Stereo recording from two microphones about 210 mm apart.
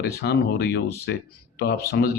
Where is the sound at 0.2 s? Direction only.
50° left (ahead or behind).